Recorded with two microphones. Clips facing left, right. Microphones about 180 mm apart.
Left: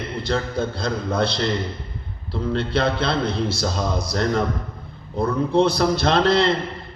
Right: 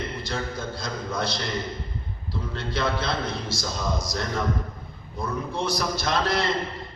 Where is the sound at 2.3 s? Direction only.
60° left (ahead or behind).